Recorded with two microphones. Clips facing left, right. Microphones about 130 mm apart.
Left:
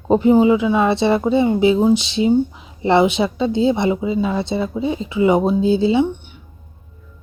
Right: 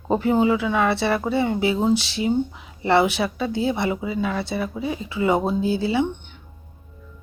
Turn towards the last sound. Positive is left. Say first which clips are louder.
# left 6 dB
turn(degrees=20)  # may be behind; listen again after turning